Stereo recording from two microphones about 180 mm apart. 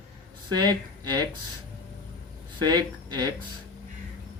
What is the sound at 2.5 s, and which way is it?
Speech, 25° right (ahead or behind).